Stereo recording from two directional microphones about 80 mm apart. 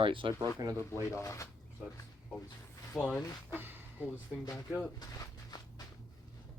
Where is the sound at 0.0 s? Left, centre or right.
Right.